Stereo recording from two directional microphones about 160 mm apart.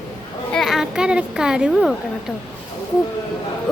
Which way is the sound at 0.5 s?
Centre (ahead or behind).